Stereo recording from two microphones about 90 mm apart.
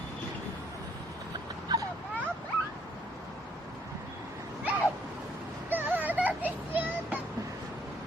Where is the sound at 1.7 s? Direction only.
50° right (ahead or behind).